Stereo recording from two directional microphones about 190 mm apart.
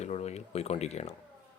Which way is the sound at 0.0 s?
35° left (ahead or behind).